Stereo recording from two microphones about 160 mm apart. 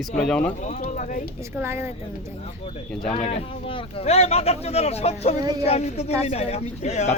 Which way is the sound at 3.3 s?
35° left (ahead or behind).